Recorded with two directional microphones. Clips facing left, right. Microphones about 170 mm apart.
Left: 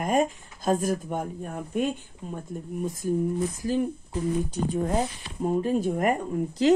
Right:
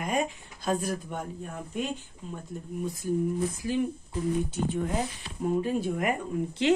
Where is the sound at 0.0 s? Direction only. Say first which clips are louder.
Left 5 dB; 45° left (ahead or behind).